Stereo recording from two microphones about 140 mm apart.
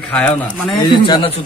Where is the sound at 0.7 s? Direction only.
35° left (ahead or behind).